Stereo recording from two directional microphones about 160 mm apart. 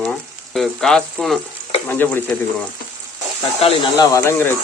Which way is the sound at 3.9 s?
20° left (ahead or behind).